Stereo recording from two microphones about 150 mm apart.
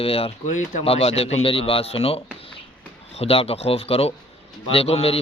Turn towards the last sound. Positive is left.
turn(degrees=40)  # may be behind; listen again after turning